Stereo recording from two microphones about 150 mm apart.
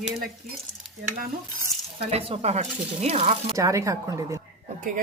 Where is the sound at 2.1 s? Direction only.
45° right (ahead or behind).